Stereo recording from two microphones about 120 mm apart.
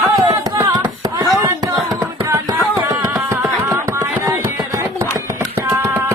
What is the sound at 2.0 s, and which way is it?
Music, 25° right (ahead or behind).